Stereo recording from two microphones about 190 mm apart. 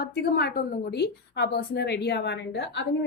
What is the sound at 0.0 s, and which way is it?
Speech, 55° left (ahead or behind).